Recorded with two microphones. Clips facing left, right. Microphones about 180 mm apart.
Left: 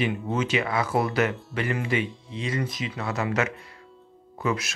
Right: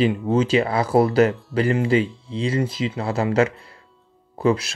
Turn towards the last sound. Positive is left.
turn(degrees=-30)  # may be behind; listen again after turning